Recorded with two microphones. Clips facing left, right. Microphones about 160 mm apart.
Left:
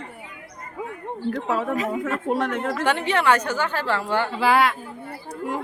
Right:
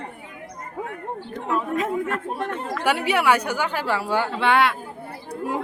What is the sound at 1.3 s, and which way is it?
Speech, 90° left.